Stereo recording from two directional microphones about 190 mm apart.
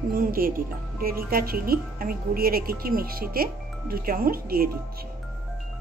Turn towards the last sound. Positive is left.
turn(degrees=-50)  # may be behind; listen again after turning